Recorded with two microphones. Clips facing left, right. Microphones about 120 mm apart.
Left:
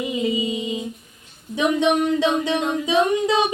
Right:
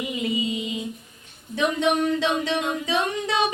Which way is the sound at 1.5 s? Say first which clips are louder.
Left 3 dB; 20° left (ahead or behind).